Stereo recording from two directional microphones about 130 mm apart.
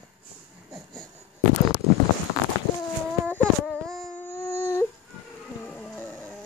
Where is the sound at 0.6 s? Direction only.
5° left (ahead or behind).